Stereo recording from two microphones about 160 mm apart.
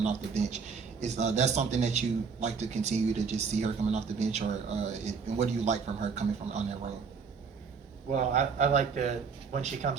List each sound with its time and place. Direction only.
0.0 s speech: 45° right (ahead or behind)
8.1 s speech: 45° right (ahead or behind)